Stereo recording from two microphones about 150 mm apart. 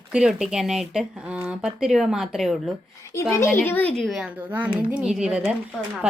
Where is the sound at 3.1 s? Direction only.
15° left (ahead or behind); by 5.5 s 5° right (ahead or behind).